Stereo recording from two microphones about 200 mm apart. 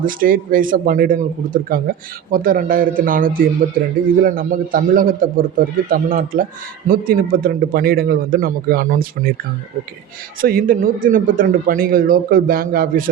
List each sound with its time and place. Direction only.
0.0 s a man's voice: 45° right (ahead or behind)
10.4 s a man's voice: 45° right (ahead or behind)